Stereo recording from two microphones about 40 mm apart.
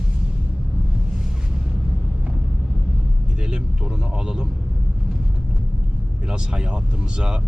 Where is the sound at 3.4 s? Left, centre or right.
Right.